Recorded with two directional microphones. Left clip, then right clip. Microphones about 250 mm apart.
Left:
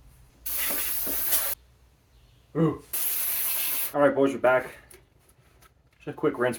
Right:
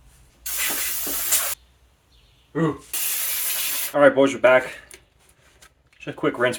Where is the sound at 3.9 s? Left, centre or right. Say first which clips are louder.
Right 6 dB; right.